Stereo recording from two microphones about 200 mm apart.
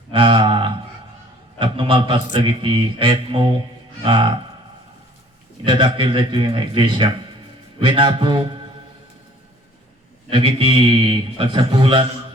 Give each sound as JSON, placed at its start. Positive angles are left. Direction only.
{"t": 0.1, "sound": "a sound", "side_deg": -25}
{"t": 2.3, "sound": "a man's voice", "side_deg": -25}
{"t": 5.6, "sound": "a man's voice", "side_deg": -25}
{"t": 10.2, "sound": "a man's voice", "side_deg": -25}